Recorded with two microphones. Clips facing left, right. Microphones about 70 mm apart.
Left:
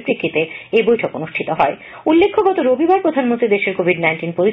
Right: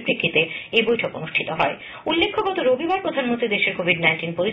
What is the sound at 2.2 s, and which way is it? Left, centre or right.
Speech, left.